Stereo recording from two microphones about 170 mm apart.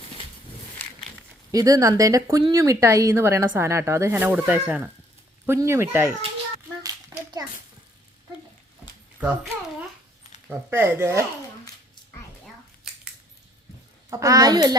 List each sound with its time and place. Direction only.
1.5 s a woman's voice: 20° right (ahead or behind)
6.8 s a sound: 25° right (ahead or behind)
9.2 s a woman's voice: 10° right (ahead or behind)
10.5 s a woman's voice: 15° right (ahead or behind)
14.1 s speech: 20° right (ahead or behind)